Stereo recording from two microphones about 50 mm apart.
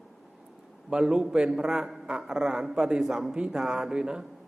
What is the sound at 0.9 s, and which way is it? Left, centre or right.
A man's voice, centre.